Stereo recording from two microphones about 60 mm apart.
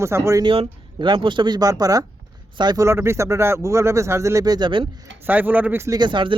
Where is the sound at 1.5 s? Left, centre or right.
Right.